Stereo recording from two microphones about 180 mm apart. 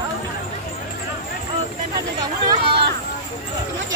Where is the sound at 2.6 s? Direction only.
65° right (ahead or behind).